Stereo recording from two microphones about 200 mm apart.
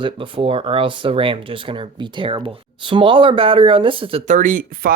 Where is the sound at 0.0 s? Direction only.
25° right (ahead or behind).